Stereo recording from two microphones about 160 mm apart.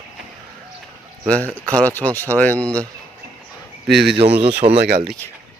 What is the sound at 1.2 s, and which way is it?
Speech, 10° left (ahead or behind).